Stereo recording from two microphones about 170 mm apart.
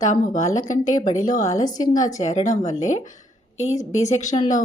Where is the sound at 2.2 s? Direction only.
45° left (ahead or behind).